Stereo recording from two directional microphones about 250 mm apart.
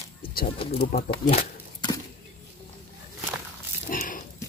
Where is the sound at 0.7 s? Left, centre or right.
Left.